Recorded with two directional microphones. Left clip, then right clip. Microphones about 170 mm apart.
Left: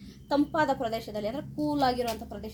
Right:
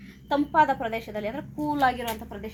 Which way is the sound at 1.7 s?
45° left (ahead or behind).